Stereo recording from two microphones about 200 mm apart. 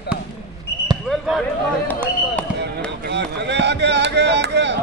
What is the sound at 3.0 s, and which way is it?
Chop, 60° right (ahead or behind).